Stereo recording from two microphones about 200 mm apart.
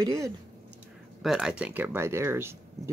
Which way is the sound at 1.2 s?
5° right (ahead or behind).